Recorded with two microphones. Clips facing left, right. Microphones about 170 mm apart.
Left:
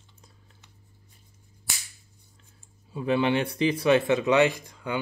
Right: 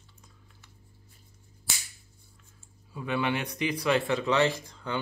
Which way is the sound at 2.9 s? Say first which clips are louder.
Left 5 dB; 25° left (ahead or behind).